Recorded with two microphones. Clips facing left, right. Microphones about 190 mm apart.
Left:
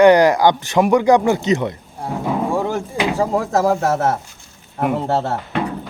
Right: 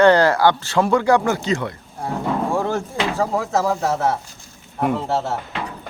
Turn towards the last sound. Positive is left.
turn(degrees=55)  # may be behind; listen again after turning